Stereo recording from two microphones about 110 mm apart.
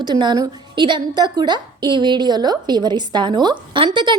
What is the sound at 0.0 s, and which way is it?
A woman's voice, 45° right (ahead or behind).